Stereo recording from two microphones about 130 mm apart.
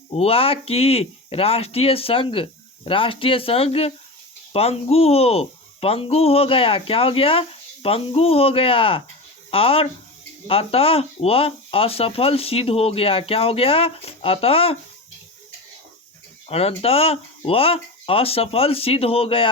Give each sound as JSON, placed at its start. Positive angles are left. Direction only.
{"t": 0.1, "sound": "speech", "side_deg": 50}
{"t": 16.5, "sound": "speech", "side_deg": 50}